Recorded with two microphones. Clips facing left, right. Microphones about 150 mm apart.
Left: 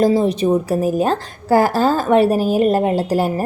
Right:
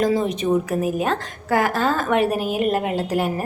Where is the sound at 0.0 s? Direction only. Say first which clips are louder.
Left 5 dB; 35° left (ahead or behind).